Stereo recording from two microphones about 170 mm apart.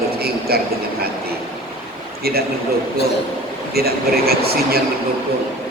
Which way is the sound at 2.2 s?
65° right (ahead or behind).